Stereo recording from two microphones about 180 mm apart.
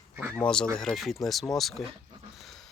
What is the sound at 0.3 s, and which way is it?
Speech, 5° left (ahead or behind).